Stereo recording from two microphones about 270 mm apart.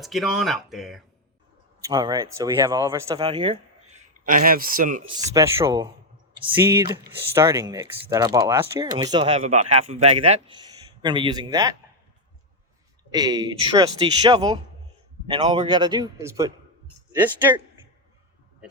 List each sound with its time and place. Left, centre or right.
0.0 s speech: centre
1.9 s speech: centre; by 5.0 s right
5.0 s speech: centre
13.1 s speech: centre